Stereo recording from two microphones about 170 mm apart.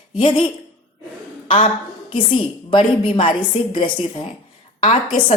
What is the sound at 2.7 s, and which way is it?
A woman's voice, 30° left (ahead or behind).